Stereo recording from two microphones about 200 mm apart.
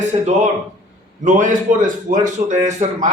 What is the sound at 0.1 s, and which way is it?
A man's voice, 35° right (ahead or behind).